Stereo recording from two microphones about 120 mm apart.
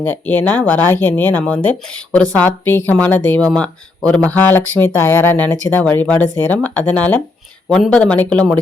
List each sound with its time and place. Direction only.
0.0 s speech: 15° left (ahead or behind)